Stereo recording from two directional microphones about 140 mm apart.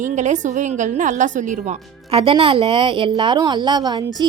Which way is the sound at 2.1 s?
40° right (ahead or behind).